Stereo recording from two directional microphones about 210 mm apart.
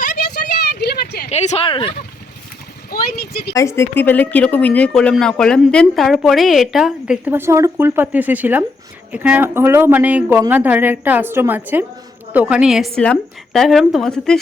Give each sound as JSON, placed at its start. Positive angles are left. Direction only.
{"t": 0.7, "sound": "vehicle", "side_deg": 50}
{"t": 1.3, "sound": "speech", "side_deg": 30}
{"t": 2.9, "sound": "speech", "side_deg": 50}
{"t": 3.5, "sound": "a woman's voice", "side_deg": 15}